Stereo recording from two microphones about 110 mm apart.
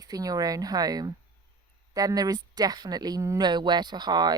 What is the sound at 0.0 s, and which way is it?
Speech, 35° right (ahead or behind).